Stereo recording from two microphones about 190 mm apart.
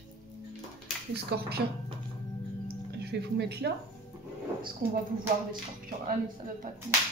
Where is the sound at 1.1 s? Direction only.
55° right (ahead or behind).